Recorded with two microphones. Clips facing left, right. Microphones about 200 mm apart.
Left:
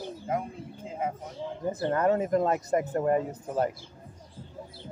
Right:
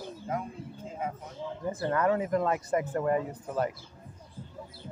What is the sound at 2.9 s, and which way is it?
Speech, 30° left (ahead or behind).